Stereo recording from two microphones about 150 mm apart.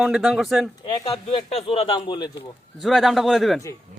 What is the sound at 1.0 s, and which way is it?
Speech, 40° left (ahead or behind).